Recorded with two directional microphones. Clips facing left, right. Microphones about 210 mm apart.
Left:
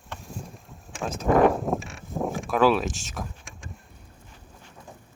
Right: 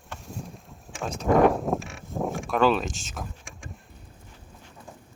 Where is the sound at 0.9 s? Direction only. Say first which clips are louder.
Even; centre (ahead or behind).